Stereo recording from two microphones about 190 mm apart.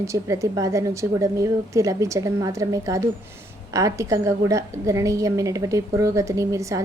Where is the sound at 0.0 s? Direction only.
15° right (ahead or behind).